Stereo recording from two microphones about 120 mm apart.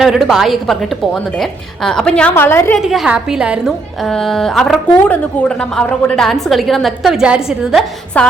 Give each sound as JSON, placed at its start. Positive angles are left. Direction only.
{"t": 0.0, "sound": "a woman's voice", "side_deg": 0}
{"t": 2.3, "sound": "a woman's voice", "side_deg": 20}
{"t": 2.7, "sound": "a woman's voice", "side_deg": 0}